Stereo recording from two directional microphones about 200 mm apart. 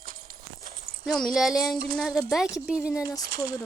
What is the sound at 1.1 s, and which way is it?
Speech, centre (ahead or behind).